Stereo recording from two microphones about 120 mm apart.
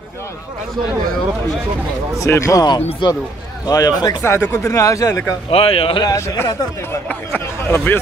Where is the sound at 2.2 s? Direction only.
25° left (ahead or behind).